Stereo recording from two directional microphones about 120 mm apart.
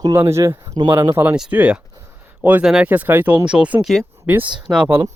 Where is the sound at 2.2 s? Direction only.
15° right (ahead or behind).